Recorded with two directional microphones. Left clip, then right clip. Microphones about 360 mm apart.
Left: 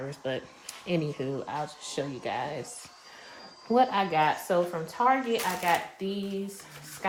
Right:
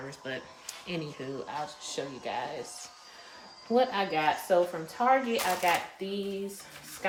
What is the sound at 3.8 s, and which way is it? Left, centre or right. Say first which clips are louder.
Speech: left 3 dB; centre.